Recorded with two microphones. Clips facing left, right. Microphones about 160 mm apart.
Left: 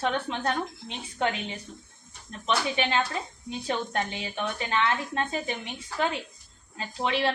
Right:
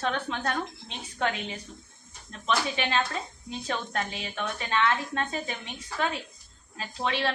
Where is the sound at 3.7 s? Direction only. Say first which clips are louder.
Left 2 dB; 25° left (ahead or behind).